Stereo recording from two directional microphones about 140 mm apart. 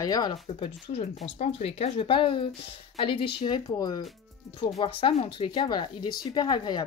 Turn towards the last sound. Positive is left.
turn(degrees=35)  # may be behind; listen again after turning